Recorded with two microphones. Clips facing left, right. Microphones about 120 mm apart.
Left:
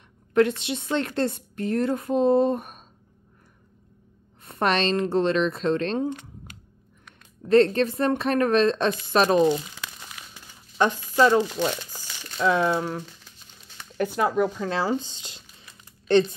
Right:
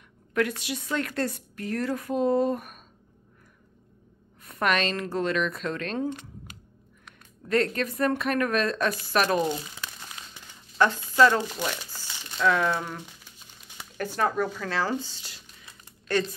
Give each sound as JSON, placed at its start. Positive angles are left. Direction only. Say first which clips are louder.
{"t": 0.3, "sound": "a woman's voice", "louder": "left 6 dB", "side_deg": 25}
{"t": 4.5, "sound": "a woman's voice", "louder": "left 3 dB", "side_deg": 30}
{"t": 7.4, "sound": "a woman's voice", "louder": "left 7 dB", "side_deg": 30}
{"t": 10.8, "sound": "a woman's voice", "louder": "even", "side_deg": 15}
{"t": 14.0, "sound": "a woman's voice", "louder": "left 4 dB", "side_deg": 10}